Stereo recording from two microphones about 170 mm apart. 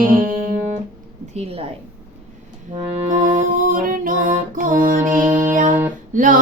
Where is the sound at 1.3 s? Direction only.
40° right (ahead or behind).